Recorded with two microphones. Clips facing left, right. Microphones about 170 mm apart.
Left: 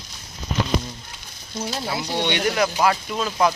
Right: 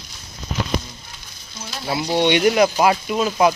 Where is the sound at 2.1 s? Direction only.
15° right (ahead or behind).